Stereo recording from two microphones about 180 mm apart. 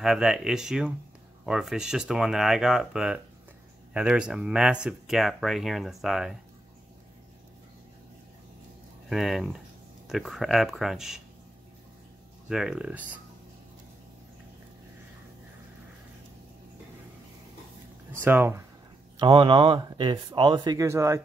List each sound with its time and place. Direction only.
0.0 s speech: 5° right (ahead or behind)
9.1 s speech: centre (ahead or behind)
12.4 s speech: 5° right (ahead or behind)
18.2 s speech: 10° right (ahead or behind)
19.1 s speech: 30° right (ahead or behind)